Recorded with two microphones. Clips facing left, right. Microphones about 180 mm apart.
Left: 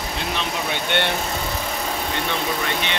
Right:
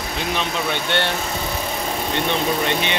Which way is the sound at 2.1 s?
20° right (ahead or behind).